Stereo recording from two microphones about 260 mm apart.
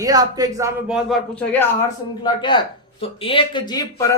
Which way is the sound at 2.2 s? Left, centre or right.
Centre.